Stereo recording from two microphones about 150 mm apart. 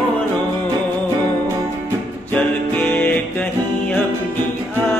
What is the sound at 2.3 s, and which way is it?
Music, 10° left (ahead or behind).